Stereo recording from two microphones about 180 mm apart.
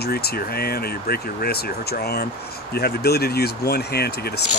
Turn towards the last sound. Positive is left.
turn(degrees=60)  # may be behind; listen again after turning